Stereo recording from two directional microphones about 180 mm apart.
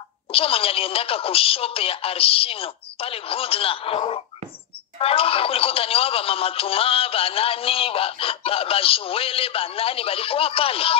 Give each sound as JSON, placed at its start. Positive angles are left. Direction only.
{"t": 0.3, "sound": "speech", "side_deg": 30}